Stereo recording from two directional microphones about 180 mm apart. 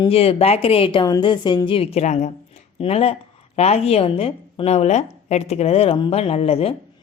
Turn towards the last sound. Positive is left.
turn(degrees=30)  # may be behind; listen again after turning